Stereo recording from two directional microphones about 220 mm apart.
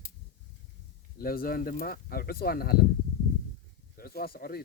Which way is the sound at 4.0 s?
45° left (ahead or behind).